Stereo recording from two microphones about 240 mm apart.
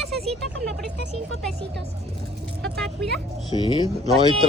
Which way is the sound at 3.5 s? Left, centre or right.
Centre.